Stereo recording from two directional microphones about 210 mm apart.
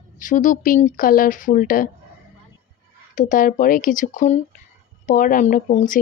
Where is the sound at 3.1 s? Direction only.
40° left (ahead or behind).